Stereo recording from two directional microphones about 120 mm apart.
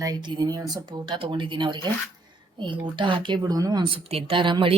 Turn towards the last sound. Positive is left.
turn(degrees=-45)  # may be behind; listen again after turning